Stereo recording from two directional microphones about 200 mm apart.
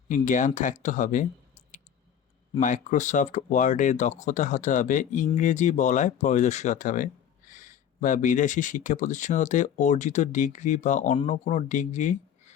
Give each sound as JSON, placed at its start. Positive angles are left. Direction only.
{"t": 0.1, "sound": "speech", "side_deg": 40}
{"t": 2.6, "sound": "speech", "side_deg": 40}